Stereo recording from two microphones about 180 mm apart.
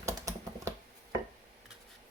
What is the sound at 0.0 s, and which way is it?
Typing, 15° right (ahead or behind).